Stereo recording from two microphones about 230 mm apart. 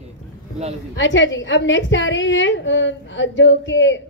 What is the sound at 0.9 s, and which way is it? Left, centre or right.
A woman's voice, left.